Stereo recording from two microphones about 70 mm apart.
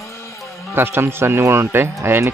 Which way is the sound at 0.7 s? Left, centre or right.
Right.